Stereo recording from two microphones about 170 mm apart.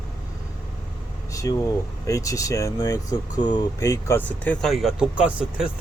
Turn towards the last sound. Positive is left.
turn(degrees=-5)  # may be behind; listen again after turning